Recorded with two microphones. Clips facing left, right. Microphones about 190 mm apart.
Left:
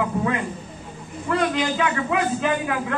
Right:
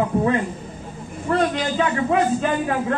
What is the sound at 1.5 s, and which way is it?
Speech, 35° right (ahead or behind).